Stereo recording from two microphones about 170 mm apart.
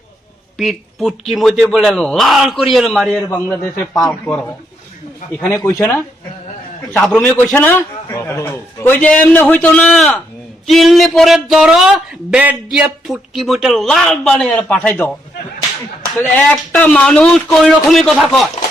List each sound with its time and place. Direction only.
0.5 s a man's voice: centre (ahead or behind); by 6.0 s 15° left (ahead or behind)
7.0 s a man's voice: 5° left (ahead or behind)
16.3 s speech: 5° left (ahead or behind)